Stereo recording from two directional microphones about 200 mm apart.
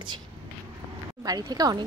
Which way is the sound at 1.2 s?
20° right (ahead or behind).